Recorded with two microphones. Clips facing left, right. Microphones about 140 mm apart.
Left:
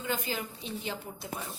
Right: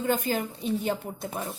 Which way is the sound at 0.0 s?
50° right (ahead or behind).